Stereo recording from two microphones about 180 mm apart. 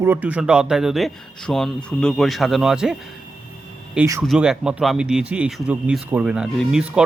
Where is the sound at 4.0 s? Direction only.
15° right (ahead or behind).